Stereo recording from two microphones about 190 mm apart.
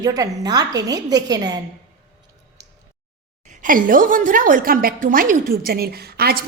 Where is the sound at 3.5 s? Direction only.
45° right (ahead or behind).